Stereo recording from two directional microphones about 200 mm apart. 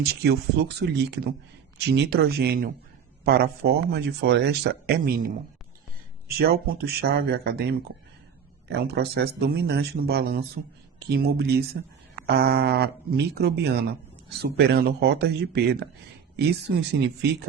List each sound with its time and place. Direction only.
0.0 s speech: 55° right (ahead or behind)
6.2 s speech: 50° right (ahead or behind)